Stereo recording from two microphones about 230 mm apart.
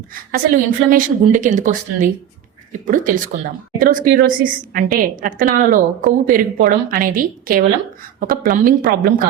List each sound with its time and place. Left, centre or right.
0.3 s speech: right